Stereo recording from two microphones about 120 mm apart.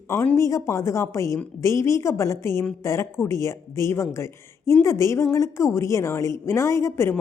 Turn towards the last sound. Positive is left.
turn(degrees=20)  # may be behind; listen again after turning